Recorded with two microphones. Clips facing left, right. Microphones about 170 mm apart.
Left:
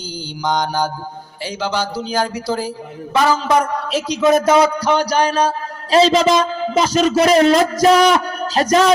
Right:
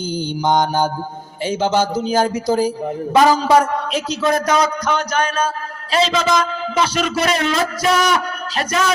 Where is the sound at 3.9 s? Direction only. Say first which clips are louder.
Left 7 dB; 15° left (ahead or behind).